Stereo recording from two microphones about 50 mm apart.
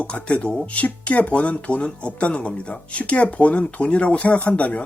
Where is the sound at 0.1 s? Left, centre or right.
Left.